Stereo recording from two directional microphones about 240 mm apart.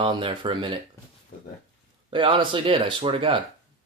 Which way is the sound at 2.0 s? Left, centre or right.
Right.